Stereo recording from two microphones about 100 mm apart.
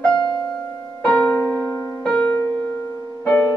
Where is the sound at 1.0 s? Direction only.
15° left (ahead or behind).